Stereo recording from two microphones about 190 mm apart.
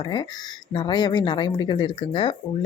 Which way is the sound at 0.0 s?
25° left (ahead or behind).